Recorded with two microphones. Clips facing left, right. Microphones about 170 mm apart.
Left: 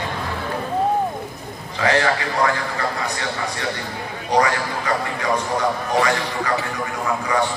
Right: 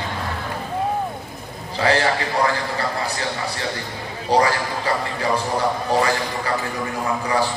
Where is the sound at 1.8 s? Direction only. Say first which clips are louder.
Even; 30° right (ahead or behind).